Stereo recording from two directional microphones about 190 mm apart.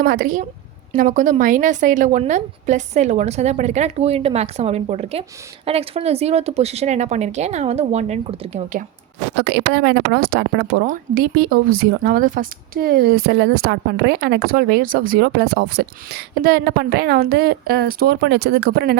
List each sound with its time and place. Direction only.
0.0 s a woman's voice: 50° right (ahead or behind); by 8.8 s 35° right (ahead or behind)
9.4 s speech: 60° right (ahead or behind)